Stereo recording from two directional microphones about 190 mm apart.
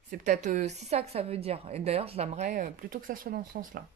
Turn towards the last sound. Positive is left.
turn(degrees=-45)  # may be behind; listen again after turning